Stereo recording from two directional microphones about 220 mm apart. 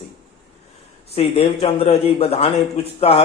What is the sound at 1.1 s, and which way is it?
Speech, 25° left (ahead or behind).